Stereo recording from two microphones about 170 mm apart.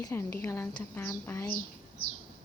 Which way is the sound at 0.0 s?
15° left (ahead or behind).